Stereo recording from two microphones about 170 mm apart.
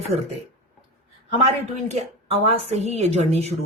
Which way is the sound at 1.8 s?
40° right (ahead or behind).